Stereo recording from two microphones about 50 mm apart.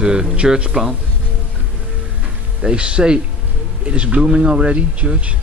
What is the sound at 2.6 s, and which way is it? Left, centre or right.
Speech, right.